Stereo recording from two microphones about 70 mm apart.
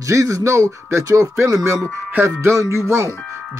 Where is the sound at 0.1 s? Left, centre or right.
Right.